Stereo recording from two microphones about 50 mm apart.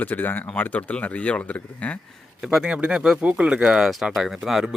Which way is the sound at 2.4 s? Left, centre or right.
Centre.